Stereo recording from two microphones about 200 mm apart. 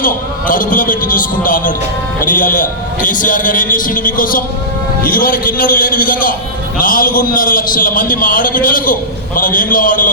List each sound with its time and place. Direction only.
0.0 s a man's voice: 40° left (ahead or behind)